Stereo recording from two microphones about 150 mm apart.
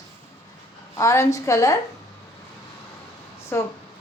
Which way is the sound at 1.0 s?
20° left (ahead or behind).